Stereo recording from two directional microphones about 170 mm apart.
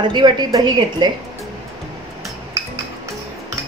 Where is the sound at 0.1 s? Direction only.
25° right (ahead or behind).